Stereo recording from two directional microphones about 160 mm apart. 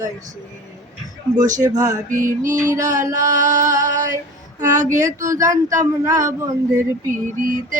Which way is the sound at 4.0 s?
20° right (ahead or behind).